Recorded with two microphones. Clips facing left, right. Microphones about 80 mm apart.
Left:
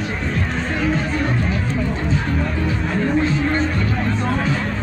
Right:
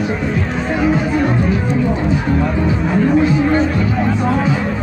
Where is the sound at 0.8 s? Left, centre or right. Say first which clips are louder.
Right 6 dB; centre.